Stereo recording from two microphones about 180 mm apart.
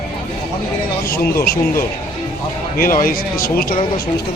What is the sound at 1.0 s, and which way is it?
Speech, 55° left (ahead or behind).